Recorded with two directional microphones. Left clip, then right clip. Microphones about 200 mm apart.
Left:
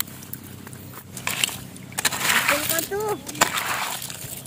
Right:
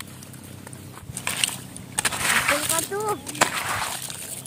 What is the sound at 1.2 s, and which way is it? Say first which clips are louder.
Biting: left 1 dB; 5° right (ahead or behind).